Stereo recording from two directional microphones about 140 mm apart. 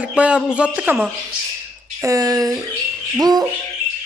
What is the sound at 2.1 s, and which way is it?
A woman's voice, 25° right (ahead or behind).